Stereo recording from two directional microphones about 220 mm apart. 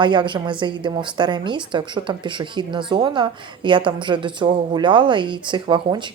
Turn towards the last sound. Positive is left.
turn(degrees=-20)  # may be behind; listen again after turning